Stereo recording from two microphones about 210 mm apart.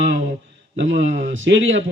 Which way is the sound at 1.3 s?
65° right (ahead or behind).